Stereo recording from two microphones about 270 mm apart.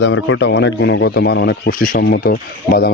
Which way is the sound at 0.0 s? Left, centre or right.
Left.